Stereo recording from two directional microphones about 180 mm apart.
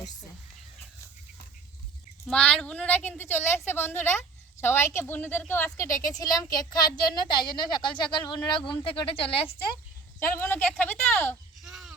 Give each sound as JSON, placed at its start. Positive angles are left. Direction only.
{"t": 2.2, "sound": "a woman's voice", "side_deg": 5}
{"t": 10.2, "sound": "a woman's voice", "side_deg": 10}
{"t": 11.6, "sound": "a sound", "side_deg": 0}